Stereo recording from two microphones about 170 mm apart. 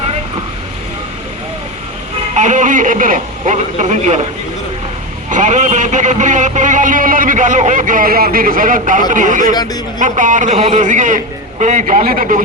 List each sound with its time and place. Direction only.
2.3 s a man's voice: 45° right (ahead or behind)
5.3 s a man's voice: 45° right (ahead or behind)